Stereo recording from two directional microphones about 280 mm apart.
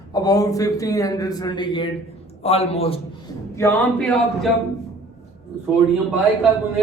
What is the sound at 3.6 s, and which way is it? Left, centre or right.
Speech, centre.